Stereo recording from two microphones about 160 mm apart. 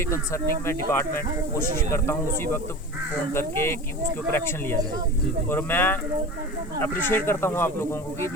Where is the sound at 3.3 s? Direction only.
15° left (ahead or behind).